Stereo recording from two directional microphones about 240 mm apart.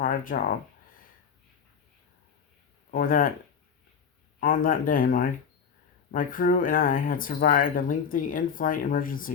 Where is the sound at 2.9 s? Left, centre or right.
Left.